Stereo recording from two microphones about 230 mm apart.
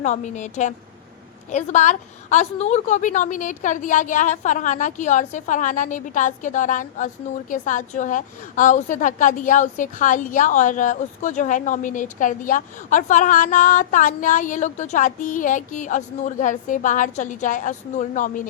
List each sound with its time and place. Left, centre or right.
0.0 s a woman's voice: left